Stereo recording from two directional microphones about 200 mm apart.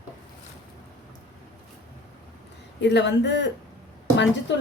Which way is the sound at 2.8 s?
60° left (ahead or behind).